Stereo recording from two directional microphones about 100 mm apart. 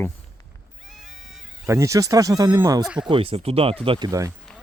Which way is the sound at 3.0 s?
60° right (ahead or behind).